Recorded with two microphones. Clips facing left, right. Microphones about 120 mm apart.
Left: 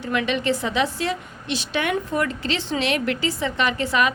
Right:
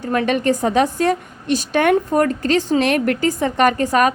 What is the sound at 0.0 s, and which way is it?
A woman's voice, 45° right (ahead or behind).